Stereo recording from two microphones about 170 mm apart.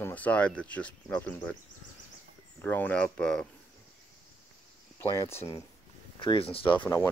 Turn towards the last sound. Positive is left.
turn(degrees=15)  # may be behind; listen again after turning